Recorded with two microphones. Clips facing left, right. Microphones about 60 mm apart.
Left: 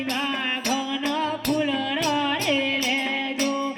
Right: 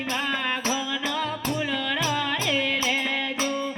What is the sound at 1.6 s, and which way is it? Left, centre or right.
Music, left.